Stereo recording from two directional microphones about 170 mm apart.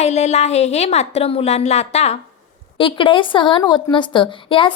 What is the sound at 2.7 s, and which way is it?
Speech, 30° left (ahead or behind).